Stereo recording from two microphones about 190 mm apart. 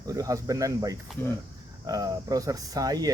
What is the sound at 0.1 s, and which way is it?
Speech, 15° right (ahead or behind).